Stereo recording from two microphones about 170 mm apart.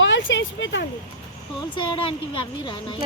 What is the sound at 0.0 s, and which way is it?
Speech, 90° left.